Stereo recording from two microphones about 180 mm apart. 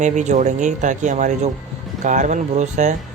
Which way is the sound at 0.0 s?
40° right (ahead or behind).